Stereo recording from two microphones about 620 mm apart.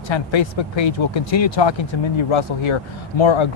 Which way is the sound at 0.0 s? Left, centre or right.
Left.